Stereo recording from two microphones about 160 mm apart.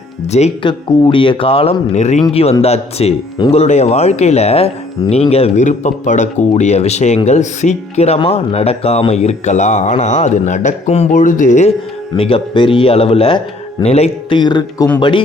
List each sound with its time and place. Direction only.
0.3 s speech: 40° left (ahead or behind)
0.7 s a man's voice: 30° left (ahead or behind); by 11.7 s 50° left (ahead or behind)
12.1 s a man's voice: 35° left (ahead or behind)
14.3 s speech: 25° left (ahead or behind)